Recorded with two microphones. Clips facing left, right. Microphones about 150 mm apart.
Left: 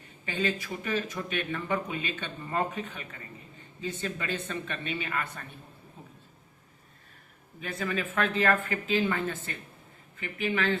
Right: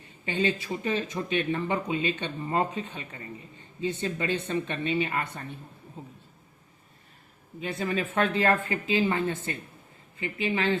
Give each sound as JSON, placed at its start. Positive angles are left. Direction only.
{"t": 0.3, "sound": "speech", "side_deg": -20}
{"t": 7.6, "sound": "speech", "side_deg": -25}